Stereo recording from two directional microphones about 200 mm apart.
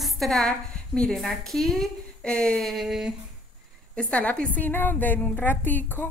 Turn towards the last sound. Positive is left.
turn(degrees=10)  # may be behind; listen again after turning